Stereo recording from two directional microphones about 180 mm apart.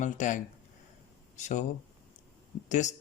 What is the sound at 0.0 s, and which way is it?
Speech, 45° left (ahead or behind).